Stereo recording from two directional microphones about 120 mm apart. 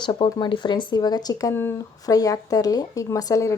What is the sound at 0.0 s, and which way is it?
Speech, 40° left (ahead or behind).